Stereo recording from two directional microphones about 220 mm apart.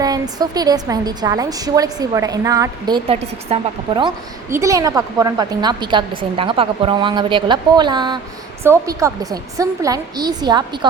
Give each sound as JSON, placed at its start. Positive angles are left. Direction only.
{"t": 0.0, "sound": "a woman's voice", "side_deg": -15}